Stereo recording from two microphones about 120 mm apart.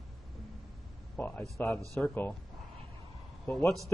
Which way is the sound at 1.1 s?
15° left (ahead or behind).